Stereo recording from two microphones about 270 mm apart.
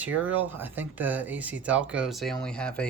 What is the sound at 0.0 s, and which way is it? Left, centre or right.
Speech, centre.